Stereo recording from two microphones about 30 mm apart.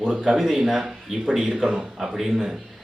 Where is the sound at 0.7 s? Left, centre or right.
Right.